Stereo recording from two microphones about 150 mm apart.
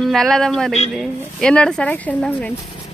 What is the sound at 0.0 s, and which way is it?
A woman's voice, centre (ahead or behind).